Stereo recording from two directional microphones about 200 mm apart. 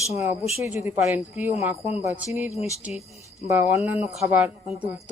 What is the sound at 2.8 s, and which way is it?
A woman's voice, 5° right (ahead or behind).